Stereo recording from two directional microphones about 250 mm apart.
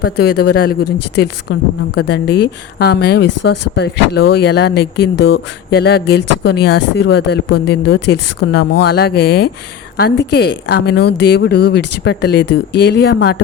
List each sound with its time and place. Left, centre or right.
0.0 s a woman's voice: left